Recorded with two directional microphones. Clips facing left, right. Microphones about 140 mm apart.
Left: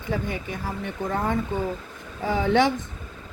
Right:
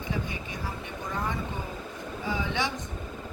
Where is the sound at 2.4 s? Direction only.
50° left (ahead or behind).